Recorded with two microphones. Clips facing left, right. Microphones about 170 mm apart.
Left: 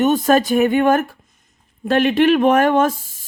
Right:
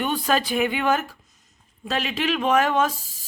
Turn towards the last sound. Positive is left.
turn(degrees=50)  # may be behind; listen again after turning